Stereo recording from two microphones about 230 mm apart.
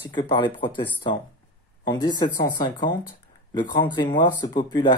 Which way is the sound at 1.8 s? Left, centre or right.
Centre.